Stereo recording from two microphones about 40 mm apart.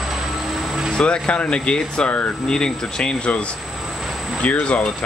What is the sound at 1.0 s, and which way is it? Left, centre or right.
Speech, left.